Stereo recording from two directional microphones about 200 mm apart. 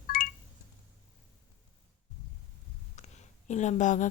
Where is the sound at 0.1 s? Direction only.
45° left (ahead or behind).